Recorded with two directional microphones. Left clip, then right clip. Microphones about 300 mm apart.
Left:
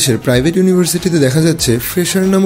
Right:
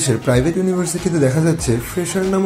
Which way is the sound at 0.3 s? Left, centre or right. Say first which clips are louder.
Left 4 dB; left.